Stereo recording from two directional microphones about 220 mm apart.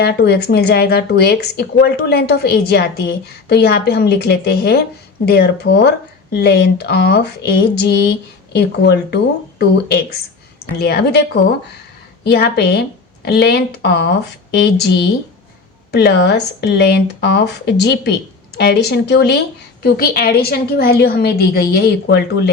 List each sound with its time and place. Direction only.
0.0 s speech: 45° left (ahead or behind)
12.2 s speech: 45° left (ahead or behind)